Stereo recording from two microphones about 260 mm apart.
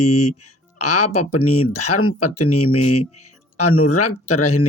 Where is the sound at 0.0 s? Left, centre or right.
Left.